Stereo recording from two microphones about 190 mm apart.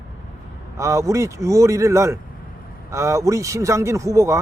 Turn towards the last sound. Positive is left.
turn(degrees=-15)  # may be behind; listen again after turning